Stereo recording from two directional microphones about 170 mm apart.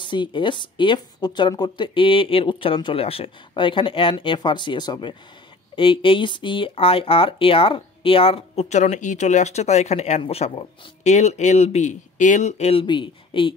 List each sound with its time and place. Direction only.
0.0 s a woman's voice: 30° left (ahead or behind)